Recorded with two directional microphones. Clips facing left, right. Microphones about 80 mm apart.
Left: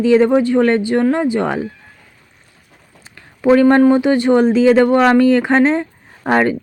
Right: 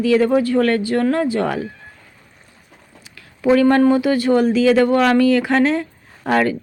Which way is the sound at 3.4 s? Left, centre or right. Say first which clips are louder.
Left 3 dB; left.